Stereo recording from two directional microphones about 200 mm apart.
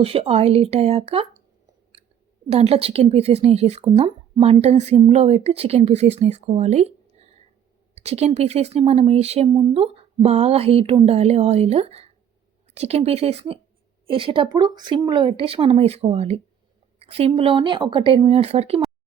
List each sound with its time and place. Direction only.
0.0 s speech: 30° right (ahead or behind)
2.5 s a woman's voice: 30° right (ahead or behind)